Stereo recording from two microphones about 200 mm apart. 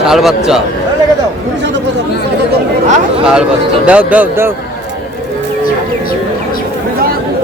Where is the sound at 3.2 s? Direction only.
5° right (ahead or behind).